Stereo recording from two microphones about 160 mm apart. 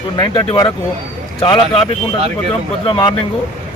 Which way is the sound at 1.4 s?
35° left (ahead or behind).